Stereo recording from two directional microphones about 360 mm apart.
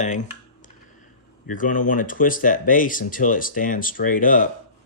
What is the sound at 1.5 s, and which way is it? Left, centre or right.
Speech, left.